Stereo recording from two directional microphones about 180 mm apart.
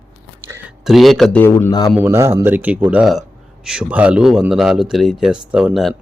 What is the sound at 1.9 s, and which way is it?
Speech, 15° right (ahead or behind).